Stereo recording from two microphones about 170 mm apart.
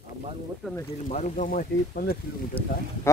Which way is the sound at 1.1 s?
45° left (ahead or behind).